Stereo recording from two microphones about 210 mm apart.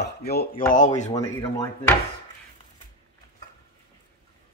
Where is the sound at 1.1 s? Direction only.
15° left (ahead or behind).